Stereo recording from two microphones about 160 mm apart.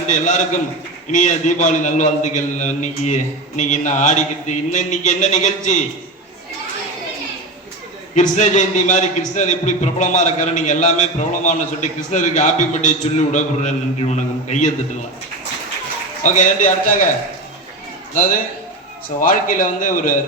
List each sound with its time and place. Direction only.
0.1 s a man's voice: 50° left (ahead or behind)
8.1 s a man's voice: 50° left (ahead or behind)
16.2 s a man's voice: 50° left (ahead or behind)
18.1 s a man's voice: 60° left (ahead or behind)